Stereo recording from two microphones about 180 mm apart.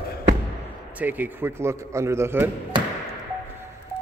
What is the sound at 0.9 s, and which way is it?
A man's voice, 10° right (ahead or behind).